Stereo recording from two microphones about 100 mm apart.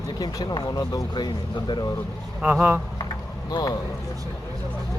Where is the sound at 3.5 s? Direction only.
40° left (ahead or behind).